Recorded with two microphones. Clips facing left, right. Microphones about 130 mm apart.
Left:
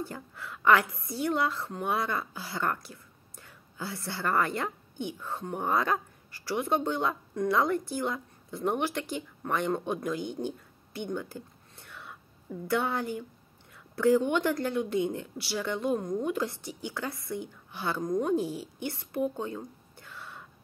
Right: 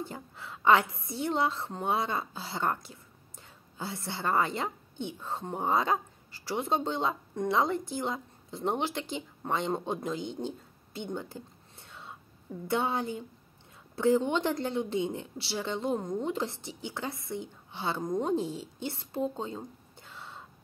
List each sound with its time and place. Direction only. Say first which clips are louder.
0.0 s a woman's voice: left 1 dB; 25° right (ahead or behind)